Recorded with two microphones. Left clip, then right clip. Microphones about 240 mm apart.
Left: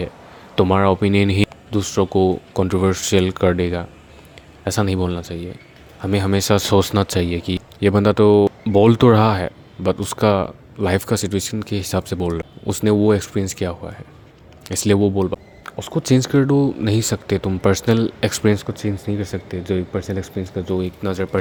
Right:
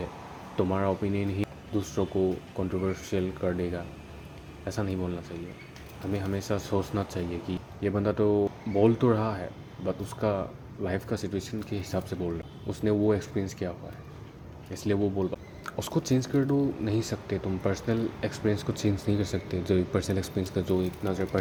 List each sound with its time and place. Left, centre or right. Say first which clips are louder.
0.5 s speech: left 12 dB; left
15.6 s speech: left 3 dB; centre
16.0 s speech: left 12 dB; left
18.7 s speech: left 4 dB; left
20.8 s speech: left 7 dB; left